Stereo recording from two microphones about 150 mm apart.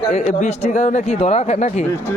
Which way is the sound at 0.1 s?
50° left (ahead or behind).